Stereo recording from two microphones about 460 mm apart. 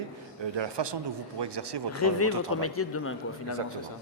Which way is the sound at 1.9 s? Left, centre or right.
Left.